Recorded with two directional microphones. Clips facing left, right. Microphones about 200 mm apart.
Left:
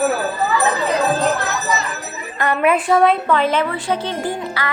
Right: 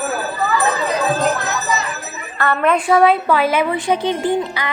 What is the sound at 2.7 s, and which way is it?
A woman's voice, centre (ahead or behind).